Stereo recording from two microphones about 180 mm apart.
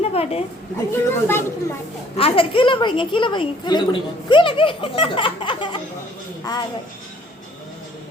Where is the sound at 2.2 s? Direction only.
30° left (ahead or behind).